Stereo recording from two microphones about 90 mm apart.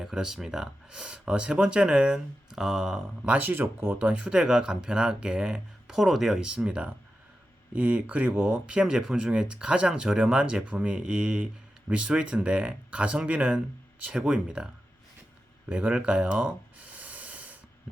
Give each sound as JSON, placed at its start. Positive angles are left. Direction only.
{"t": 0.0, "sound": "speech", "side_deg": -5}
{"t": 3.2, "sound": "speech", "side_deg": -20}
{"t": 15.7, "sound": "a sound", "side_deg": -10}